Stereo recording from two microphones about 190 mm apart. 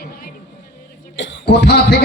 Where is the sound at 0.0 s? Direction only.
50° left (ahead or behind).